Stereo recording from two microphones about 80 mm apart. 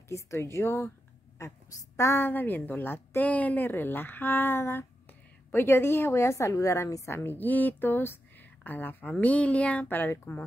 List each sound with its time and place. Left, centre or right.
0.1 s speech: left
2.0 s a woman's voice: left
2.2 s a woman's voice: left